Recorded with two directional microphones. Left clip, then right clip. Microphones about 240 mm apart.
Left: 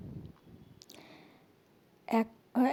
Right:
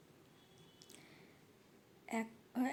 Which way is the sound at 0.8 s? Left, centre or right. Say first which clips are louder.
Left 7 dB; left.